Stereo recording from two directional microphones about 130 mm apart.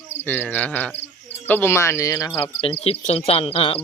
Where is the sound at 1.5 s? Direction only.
15° left (ahead or behind).